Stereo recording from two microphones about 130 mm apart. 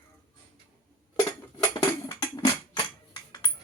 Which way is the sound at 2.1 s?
30° left (ahead or behind).